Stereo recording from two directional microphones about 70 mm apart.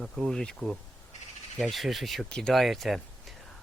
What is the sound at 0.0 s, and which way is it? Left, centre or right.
Speech, centre.